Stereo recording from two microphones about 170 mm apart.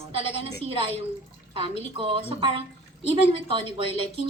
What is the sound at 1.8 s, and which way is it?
Speech, 30° right (ahead or behind).